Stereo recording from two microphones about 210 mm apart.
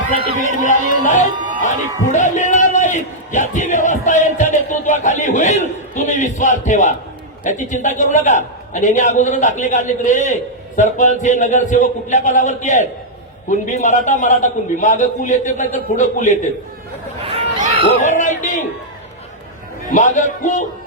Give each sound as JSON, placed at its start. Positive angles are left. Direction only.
{"t": 0.6, "sound": "a man's voice", "side_deg": 35}
{"t": 1.6, "sound": "a sound", "side_deg": 35}
{"t": 7.4, "sound": "a man's voice", "side_deg": 35}
{"t": 17.2, "sound": "a sound", "side_deg": -30}
{"t": 18.0, "sound": "a man's voice", "side_deg": 35}
{"t": 19.9, "sound": "a man's voice", "side_deg": 35}